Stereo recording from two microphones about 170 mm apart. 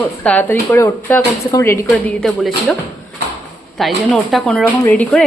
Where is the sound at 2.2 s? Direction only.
Centre (ahead or behind).